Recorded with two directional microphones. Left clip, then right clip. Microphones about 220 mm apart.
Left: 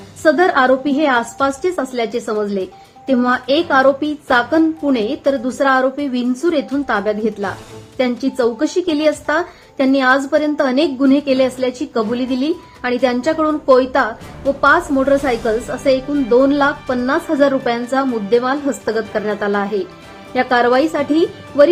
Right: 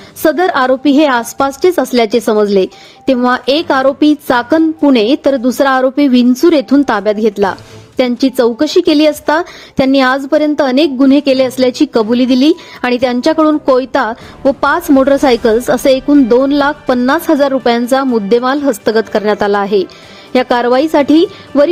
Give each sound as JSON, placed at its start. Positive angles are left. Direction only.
{"t": 0.2, "sound": "speech", "side_deg": -45}